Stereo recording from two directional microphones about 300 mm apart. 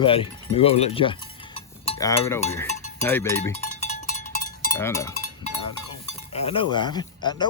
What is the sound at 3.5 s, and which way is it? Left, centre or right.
Cowbell, left.